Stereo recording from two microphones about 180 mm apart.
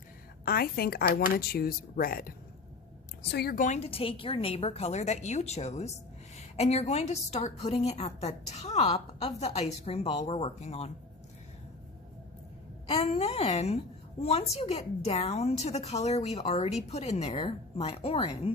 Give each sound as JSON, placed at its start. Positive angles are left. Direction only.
{"t": 0.4, "sound": "speech", "side_deg": 60}
{"t": 3.2, "sound": "a woman's voice", "side_deg": 65}
{"t": 12.9, "sound": "a woman's voice", "side_deg": 35}